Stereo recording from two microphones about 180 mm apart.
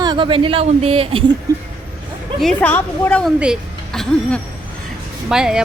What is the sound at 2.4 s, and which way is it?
A woman's voice, 5° left (ahead or behind).